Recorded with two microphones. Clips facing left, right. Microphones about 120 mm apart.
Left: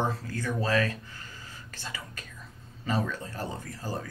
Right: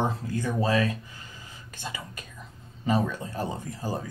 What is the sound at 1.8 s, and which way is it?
Whispering, 20° right (ahead or behind).